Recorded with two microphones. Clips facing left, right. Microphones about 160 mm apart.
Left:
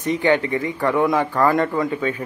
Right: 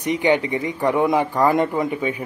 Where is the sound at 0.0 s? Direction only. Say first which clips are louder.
Even; 15° right (ahead or behind).